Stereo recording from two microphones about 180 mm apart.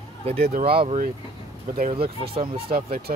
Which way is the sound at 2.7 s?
55° right (ahead or behind).